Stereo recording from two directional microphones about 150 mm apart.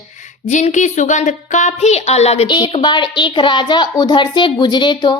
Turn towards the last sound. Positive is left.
turn(degrees=30)  # may be behind; listen again after turning